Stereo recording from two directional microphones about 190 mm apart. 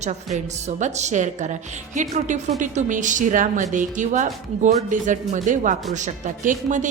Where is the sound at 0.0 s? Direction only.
35° right (ahead or behind).